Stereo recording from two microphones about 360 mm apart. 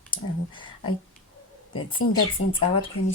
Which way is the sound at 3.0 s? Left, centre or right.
Left.